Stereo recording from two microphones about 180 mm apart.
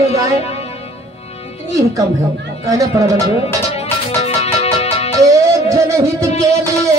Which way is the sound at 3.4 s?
35° left (ahead or behind).